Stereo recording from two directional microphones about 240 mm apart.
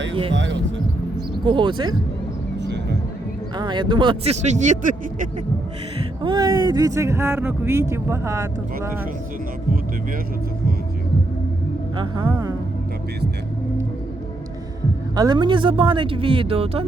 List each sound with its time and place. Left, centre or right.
0.1 s speech: right
0.3 s speech: right
1.5 s speech: centre
3.6 s speech: centre
6.2 s speech: centre
11.9 s speech: centre
15.1 s speech: centre